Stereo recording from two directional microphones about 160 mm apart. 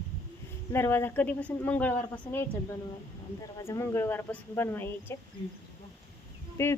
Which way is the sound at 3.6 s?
15° left (ahead or behind).